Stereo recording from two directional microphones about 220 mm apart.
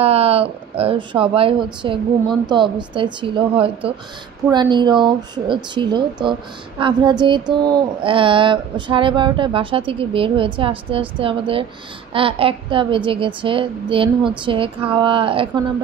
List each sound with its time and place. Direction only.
0.0 s speech: 25° right (ahead or behind)